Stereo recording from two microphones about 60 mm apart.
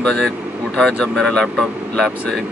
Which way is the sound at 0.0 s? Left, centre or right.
Centre.